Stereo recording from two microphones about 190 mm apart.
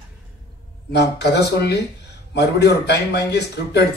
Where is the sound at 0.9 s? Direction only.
60° left (ahead or behind).